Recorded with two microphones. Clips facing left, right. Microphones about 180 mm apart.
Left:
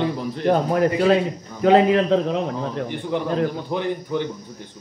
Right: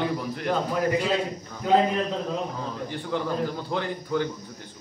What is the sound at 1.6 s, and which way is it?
A man's voice, 80° left.